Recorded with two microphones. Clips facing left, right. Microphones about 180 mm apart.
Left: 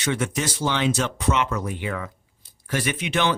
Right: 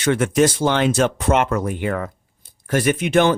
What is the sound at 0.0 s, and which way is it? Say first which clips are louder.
Speech: right 9 dB; 55° right (ahead or behind).